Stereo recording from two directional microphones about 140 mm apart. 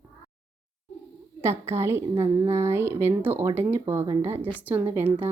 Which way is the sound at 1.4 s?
20° right (ahead or behind).